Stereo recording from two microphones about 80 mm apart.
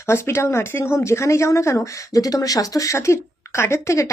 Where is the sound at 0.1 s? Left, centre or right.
Left.